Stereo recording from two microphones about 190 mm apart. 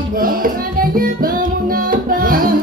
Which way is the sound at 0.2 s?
50° right (ahead or behind).